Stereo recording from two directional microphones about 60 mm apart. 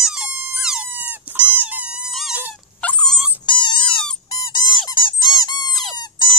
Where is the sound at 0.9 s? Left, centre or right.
Right.